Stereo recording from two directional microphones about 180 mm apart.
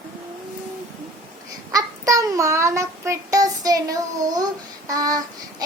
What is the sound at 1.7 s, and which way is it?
Child singing, 20° right (ahead or behind).